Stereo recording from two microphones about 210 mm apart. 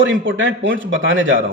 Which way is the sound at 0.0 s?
65° right (ahead or behind).